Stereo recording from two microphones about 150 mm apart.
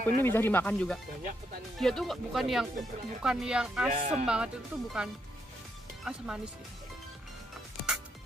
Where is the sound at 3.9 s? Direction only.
50° right (ahead or behind).